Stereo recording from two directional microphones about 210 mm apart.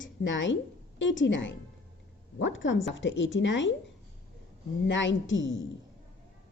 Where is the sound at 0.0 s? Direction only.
60° left (ahead or behind).